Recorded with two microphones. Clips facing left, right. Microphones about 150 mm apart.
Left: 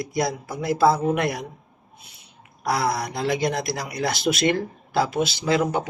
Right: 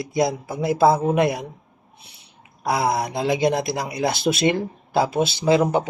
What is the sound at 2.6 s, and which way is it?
Speech, 20° right (ahead or behind).